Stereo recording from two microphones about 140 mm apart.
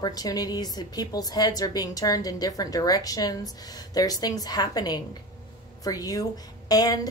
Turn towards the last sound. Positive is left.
turn(degrees=25)  # may be behind; listen again after turning